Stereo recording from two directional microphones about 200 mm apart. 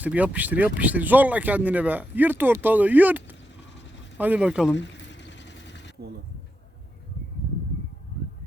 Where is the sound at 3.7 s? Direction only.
60° left (ahead or behind).